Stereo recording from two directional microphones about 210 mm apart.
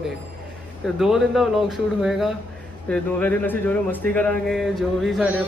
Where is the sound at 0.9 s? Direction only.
Centre (ahead or behind).